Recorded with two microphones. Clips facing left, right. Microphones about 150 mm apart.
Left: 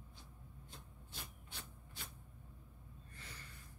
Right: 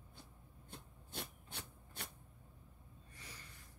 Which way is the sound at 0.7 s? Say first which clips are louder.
Right 7 dB; 70° right (ahead or behind).